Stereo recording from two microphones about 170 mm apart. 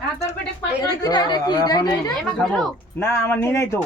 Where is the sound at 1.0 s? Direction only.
25° left (ahead or behind).